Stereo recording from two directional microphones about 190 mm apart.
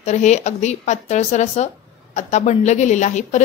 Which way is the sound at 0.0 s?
40° left (ahead or behind).